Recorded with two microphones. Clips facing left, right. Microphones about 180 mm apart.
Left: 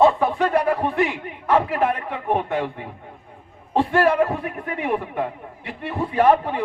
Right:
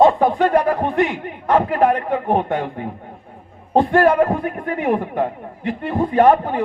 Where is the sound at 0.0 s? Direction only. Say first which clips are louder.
Right 3 dB; 40° right (ahead or behind).